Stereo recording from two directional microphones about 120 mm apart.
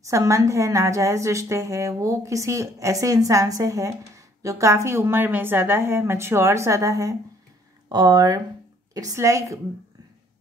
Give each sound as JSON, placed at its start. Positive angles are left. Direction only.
{"t": 0.0, "sound": "a woman's voice", "side_deg": -25}